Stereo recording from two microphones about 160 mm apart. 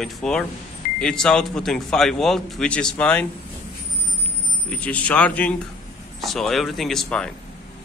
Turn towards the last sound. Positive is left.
turn(degrees=5)  # may be behind; listen again after turning